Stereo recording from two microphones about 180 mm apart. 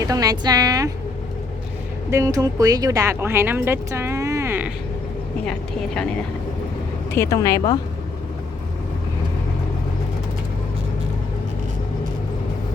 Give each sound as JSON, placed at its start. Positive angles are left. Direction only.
{"t": 0.0, "sound": "a woman's voice", "side_deg": -20}
{"t": 2.0, "sound": "speech", "side_deg": -15}
{"t": 5.5, "sound": "speech", "side_deg": 5}
{"t": 7.1, "sound": "a woman's voice", "side_deg": 15}